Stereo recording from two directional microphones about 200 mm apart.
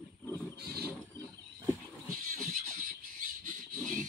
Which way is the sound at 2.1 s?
45° right (ahead or behind).